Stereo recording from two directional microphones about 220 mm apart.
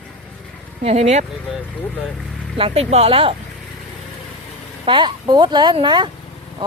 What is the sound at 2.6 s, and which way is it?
Speech, 30° right (ahead or behind).